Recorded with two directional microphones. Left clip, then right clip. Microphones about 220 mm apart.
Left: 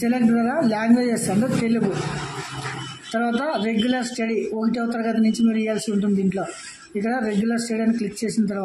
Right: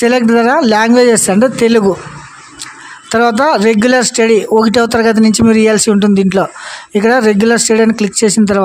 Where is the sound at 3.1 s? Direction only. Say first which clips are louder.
Right 14 dB; 50° right (ahead or behind).